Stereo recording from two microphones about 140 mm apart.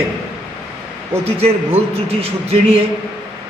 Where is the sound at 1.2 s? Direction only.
45° right (ahead or behind).